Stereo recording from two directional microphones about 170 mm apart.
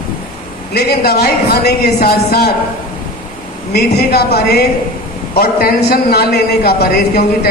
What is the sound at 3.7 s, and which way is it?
A man's voice, 70° left (ahead or behind).